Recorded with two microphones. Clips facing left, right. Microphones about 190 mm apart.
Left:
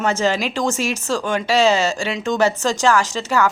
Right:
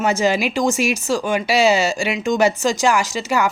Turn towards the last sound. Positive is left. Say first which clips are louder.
# left 1 dB
turn(degrees=-10)  # may be behind; listen again after turning